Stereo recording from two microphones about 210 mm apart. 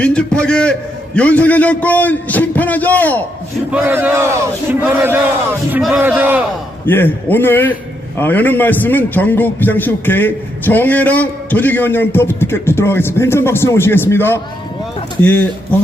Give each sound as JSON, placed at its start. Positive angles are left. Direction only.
{"t": 0.0, "sound": "a man's voice", "side_deg": 5}
{"t": 3.7, "sound": "a man's voice", "side_deg": -10}
{"t": 6.8, "sound": "a man's voice", "side_deg": 10}